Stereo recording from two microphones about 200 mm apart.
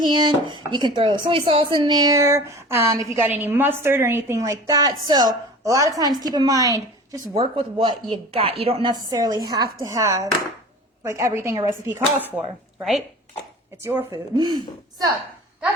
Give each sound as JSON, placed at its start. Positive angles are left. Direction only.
{"t": 0.0, "sound": "a woman's voice", "side_deg": -20}
{"t": 13.8, "sound": "a woman's voice", "side_deg": -15}